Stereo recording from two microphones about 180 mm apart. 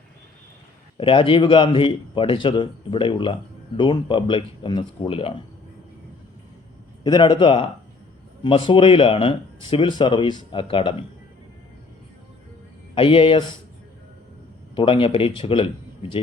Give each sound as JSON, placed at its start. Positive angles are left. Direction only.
{"t": 0.9, "sound": "a man's voice", "side_deg": 30}
{"t": 7.0, "sound": "a man's voice", "side_deg": 25}
{"t": 12.9, "sound": "a man's voice", "side_deg": 30}
{"t": 14.8, "sound": "a man's voice", "side_deg": 30}